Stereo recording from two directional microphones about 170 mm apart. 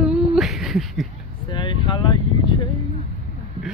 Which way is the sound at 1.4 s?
25° left (ahead or behind).